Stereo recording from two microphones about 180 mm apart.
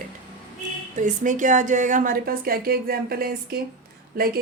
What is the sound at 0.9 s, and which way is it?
A woman's voice, 45° right (ahead or behind).